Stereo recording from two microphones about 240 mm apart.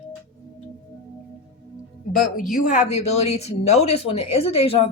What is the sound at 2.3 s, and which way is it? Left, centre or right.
Speech, left.